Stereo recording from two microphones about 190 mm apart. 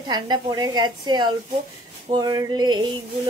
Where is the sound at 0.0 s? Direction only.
20° right (ahead or behind).